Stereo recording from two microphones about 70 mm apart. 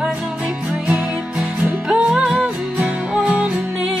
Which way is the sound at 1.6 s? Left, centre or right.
Centre.